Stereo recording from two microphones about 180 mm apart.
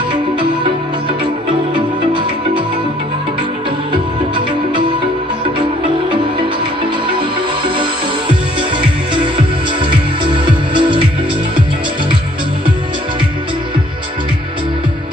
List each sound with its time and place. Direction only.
1.7 s music: 25° right (ahead or behind)
3.9 s music: 25° right (ahead or behind)
8.3 s music: 25° right (ahead or behind)
10.3 s music: 25° right (ahead or behind)